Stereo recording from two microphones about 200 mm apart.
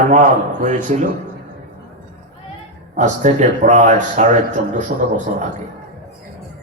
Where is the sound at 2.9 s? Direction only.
35° right (ahead or behind).